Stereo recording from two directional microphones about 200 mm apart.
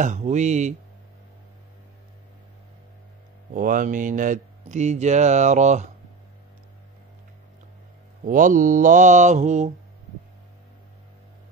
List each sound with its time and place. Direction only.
0.0 s mantra: 40° right (ahead or behind)
3.5 s mantra: 45° right (ahead or behind)
8.3 s mantra: 40° right (ahead or behind)